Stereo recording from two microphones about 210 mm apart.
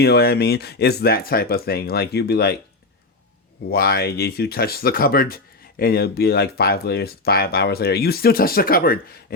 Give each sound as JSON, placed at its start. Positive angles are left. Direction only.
{"t": 0.0, "sound": "speech", "side_deg": 50}
{"t": 3.7, "sound": "speech", "side_deg": 45}